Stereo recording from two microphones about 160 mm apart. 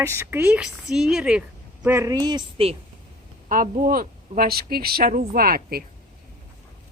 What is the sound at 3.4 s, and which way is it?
Speech, 60° right (ahead or behind).